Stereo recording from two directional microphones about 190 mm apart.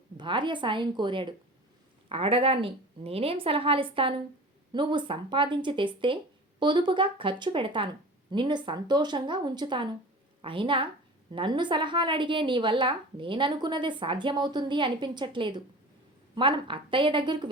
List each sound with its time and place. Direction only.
0.2 s a woman's voice: 25° right (ahead or behind)